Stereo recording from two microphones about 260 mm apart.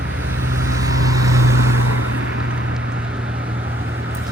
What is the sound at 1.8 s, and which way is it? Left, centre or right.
Vehicle, right.